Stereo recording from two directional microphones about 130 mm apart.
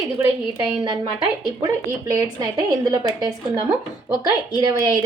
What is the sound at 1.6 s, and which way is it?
A woman's voice, 30° right (ahead or behind).